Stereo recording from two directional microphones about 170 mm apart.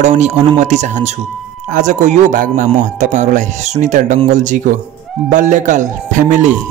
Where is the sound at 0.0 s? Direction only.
45° right (ahead or behind).